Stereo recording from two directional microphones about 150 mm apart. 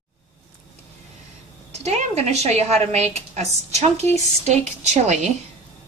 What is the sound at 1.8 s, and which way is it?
A woman's voice, 45° right (ahead or behind).